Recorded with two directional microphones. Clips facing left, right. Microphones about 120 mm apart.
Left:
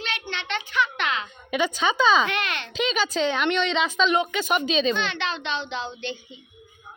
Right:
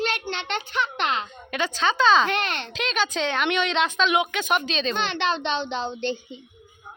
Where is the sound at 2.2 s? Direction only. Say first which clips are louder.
Right 2 dB; 35° right (ahead or behind).